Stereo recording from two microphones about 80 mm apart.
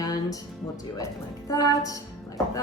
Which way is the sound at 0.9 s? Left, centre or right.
Left.